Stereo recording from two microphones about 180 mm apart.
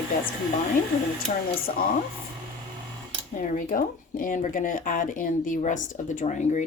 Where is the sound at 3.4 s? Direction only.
50° left (ahead or behind).